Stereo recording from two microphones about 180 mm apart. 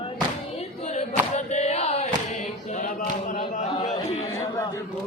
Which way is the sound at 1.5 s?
35° left (ahead or behind).